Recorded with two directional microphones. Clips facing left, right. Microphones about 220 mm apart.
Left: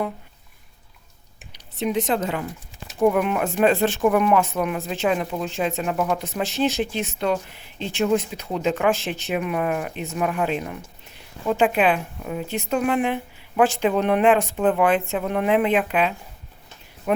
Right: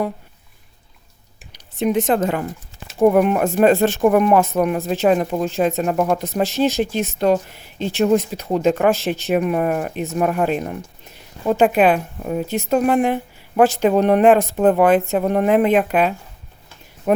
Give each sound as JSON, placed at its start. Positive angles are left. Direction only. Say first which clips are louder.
{"t": 1.5, "sound": "speech", "louder": "right 5 dB", "side_deg": -50}